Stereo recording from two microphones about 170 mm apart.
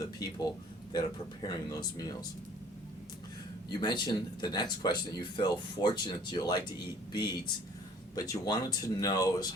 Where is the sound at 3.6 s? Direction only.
25° left (ahead or behind).